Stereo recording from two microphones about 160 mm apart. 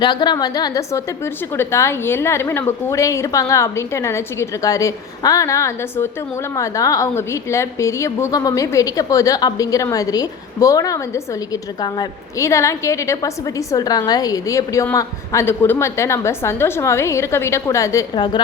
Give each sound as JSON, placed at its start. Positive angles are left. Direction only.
{"t": 0.0, "sound": "a woman's voice", "side_deg": 30}
{"t": 18.1, "sound": "a woman's voice", "side_deg": 30}